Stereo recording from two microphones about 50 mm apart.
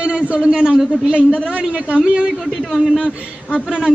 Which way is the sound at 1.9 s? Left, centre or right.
Right.